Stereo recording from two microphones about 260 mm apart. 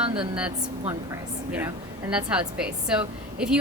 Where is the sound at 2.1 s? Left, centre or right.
Centre.